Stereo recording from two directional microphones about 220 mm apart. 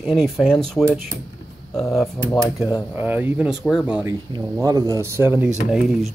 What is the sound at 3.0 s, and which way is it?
Speech, 10° right (ahead or behind).